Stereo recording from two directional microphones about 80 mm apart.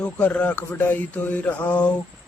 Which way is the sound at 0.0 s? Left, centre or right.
Centre.